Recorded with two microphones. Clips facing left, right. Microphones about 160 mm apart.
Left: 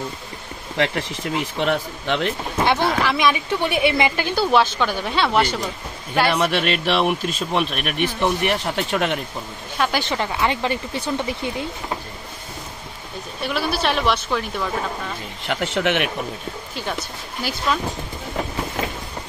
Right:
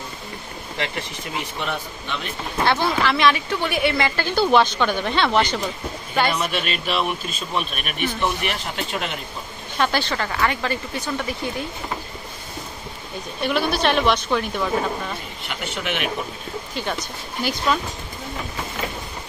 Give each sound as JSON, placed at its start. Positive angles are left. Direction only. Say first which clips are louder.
{"t": 1.6, "sound": "a man's voice", "louder": "left 6 dB", "side_deg": 90}
{"t": 2.5, "sound": "speech", "louder": "even", "side_deg": 10}
{"t": 4.4, "sound": "a woman's voice", "louder": "right 1 dB", "side_deg": 5}
{"t": 6.3, "sound": "speech", "louder": "left 5 dB", "side_deg": 60}
{"t": 9.8, "sound": "speech", "louder": "even", "side_deg": 15}
{"t": 13.4, "sound": "a woman's voice", "louder": "right 2 dB", "side_deg": 5}
{"t": 15.4, "sound": "speech", "louder": "left 8 dB", "side_deg": 90}
{"t": 17.4, "sound": "a woman's voice", "louder": "right 1 dB", "side_deg": 5}